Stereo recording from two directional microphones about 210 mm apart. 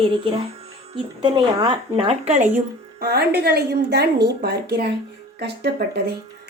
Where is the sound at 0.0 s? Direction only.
25° right (ahead or behind).